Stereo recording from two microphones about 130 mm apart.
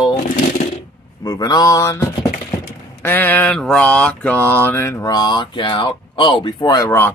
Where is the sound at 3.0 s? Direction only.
15° left (ahead or behind).